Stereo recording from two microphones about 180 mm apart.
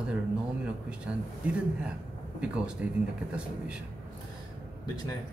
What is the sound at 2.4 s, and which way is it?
Speech, 5° right (ahead or behind).